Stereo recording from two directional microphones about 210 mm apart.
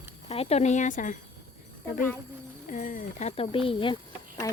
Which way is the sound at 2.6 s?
40° left (ahead or behind).